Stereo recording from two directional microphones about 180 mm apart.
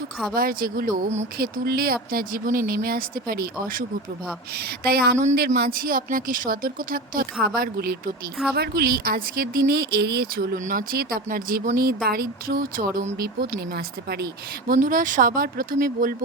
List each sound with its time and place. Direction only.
0.3 s speech: 55° right (ahead or behind)
1.4 s speech: 55° right (ahead or behind)
14.7 s speech: 50° right (ahead or behind)